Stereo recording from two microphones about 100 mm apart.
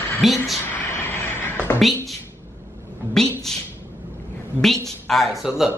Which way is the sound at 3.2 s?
5° left (ahead or behind).